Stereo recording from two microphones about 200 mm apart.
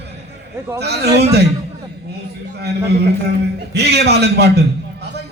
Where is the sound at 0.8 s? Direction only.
55° right (ahead or behind).